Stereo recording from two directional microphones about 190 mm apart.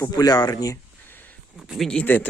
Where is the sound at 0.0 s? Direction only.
20° left (ahead or behind).